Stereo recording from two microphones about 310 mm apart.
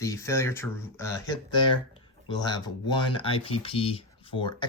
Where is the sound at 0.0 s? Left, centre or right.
Centre.